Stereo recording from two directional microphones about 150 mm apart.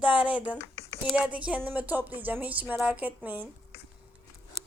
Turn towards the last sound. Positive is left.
turn(degrees=-10)  # may be behind; listen again after turning